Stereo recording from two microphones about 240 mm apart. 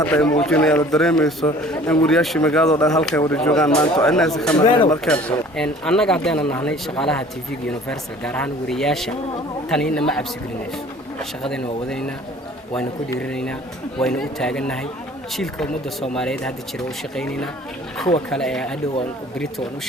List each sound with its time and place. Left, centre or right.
0.0 s speech: centre
4.5 s speech: centre
5.0 s speech: centre
13.1 s speech: centre